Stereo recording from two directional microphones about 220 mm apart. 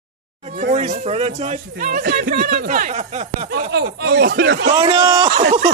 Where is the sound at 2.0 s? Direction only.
45° right (ahead or behind).